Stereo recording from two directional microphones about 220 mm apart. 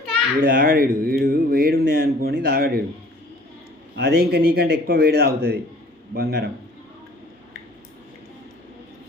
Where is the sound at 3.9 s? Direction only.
45° right (ahead or behind).